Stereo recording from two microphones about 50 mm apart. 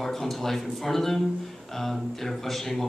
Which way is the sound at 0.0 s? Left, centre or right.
Centre.